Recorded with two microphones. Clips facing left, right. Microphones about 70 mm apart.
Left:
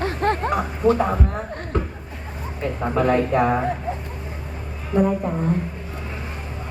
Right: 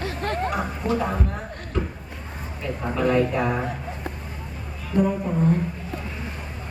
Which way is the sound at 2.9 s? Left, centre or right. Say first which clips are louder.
Left 2 dB; left.